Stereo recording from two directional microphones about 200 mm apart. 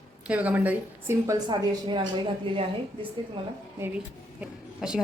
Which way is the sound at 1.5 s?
25° right (ahead or behind).